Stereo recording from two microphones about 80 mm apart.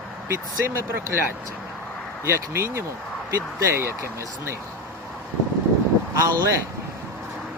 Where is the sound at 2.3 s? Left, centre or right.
Right.